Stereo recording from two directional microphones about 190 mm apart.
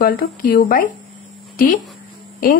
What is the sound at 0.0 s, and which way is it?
Speech, 50° left (ahead or behind).